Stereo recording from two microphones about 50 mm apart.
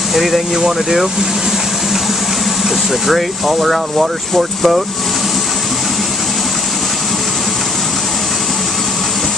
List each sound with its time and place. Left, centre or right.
0.1 s speech: centre
3.1 s speech: centre